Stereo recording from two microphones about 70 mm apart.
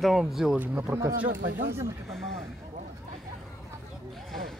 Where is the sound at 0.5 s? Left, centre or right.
Right.